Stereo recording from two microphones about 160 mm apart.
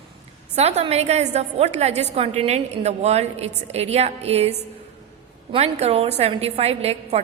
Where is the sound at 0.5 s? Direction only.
40° right (ahead or behind).